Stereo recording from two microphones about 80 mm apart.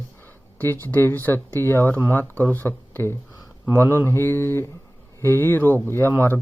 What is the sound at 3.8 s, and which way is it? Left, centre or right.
Mantra, left.